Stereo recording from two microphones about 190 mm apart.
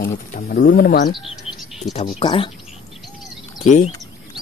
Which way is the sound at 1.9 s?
30° left (ahead or behind).